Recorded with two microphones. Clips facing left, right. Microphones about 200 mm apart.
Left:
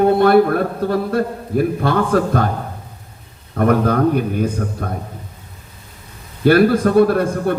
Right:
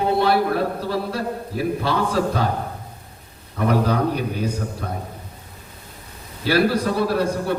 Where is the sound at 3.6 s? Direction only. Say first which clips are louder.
Left 5 dB; 50° left (ahead or behind).